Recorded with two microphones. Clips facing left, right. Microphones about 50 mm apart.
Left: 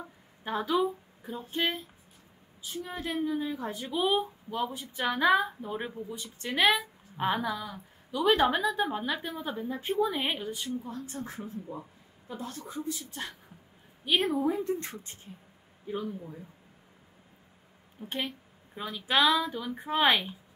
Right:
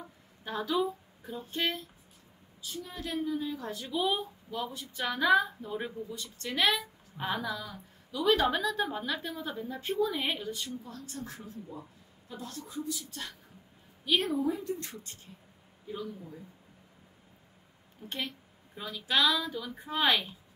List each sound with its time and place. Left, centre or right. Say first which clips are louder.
0.4 s a woman's voice: left 3 dB; left
14.4 s a woman's voice: left 3 dB; left
18.0 s a woman's voice: left 3 dB; centre